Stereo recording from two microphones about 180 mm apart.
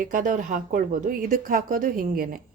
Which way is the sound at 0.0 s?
45° right (ahead or behind).